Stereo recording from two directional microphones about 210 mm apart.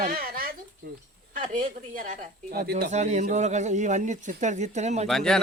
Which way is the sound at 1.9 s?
40° right (ahead or behind).